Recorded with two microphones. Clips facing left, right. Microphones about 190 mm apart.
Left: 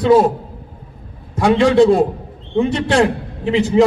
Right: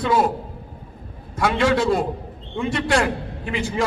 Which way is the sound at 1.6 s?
25° left (ahead or behind).